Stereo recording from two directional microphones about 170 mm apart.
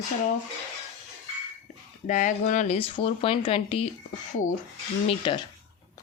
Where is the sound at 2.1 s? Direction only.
50° left (ahead or behind).